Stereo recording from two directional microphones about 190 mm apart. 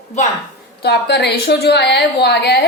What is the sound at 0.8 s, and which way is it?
A woman's voice, 60° left (ahead or behind).